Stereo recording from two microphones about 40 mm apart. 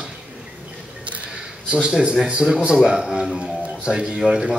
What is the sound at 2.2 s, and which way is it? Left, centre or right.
Speech, right.